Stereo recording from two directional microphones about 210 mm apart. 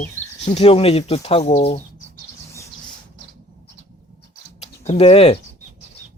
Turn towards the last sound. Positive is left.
turn(degrees=25)  # may be behind; listen again after turning